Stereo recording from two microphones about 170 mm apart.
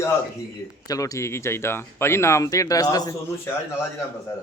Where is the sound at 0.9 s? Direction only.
20° left (ahead or behind).